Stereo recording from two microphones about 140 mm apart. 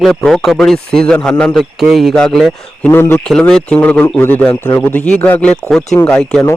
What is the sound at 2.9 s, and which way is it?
Speech, 15° left (ahead or behind).